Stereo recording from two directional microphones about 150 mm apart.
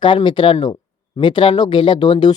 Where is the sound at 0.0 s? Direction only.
30° left (ahead or behind).